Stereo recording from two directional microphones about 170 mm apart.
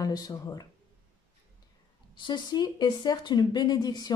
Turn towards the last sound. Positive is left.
turn(degrees=25)  # may be behind; listen again after turning